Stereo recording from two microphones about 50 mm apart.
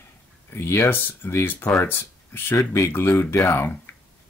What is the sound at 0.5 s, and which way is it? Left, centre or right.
Speech, left.